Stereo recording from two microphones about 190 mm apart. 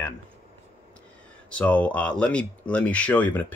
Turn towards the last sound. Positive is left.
turn(degrees=10)  # may be behind; listen again after turning